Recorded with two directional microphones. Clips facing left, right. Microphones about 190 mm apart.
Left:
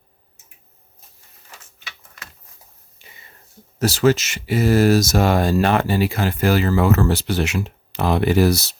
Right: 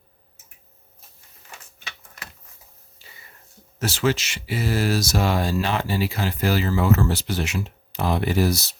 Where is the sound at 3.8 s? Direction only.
40° left (ahead or behind).